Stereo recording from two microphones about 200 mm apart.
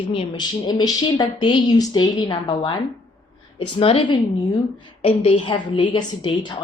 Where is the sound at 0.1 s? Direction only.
20° left (ahead or behind).